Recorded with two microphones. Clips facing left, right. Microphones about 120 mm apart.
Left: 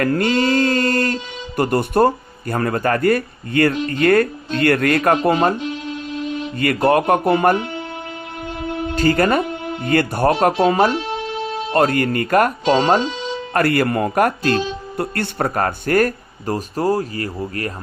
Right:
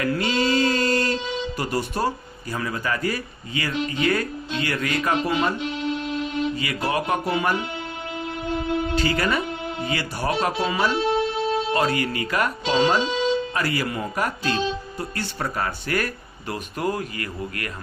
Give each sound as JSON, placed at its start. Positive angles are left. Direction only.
{"t": 0.0, "sound": "speech", "side_deg": 50}
{"t": 6.6, "sound": "speech", "side_deg": 55}
{"t": 9.0, "sound": "speech", "side_deg": 45}